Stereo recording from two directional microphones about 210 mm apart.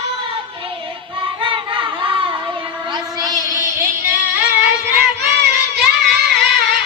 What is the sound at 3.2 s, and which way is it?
Child singing, 15° right (ahead or behind).